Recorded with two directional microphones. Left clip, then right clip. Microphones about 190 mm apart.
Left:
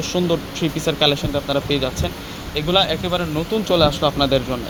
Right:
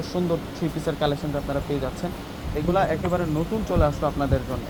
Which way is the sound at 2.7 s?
25° left (ahead or behind).